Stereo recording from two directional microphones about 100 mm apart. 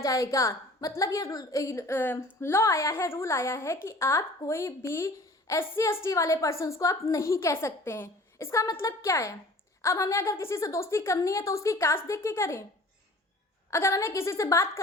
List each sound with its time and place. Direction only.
0.0 s a woman's voice: 30° left (ahead or behind)
13.7 s a woman's voice: 30° left (ahead or behind)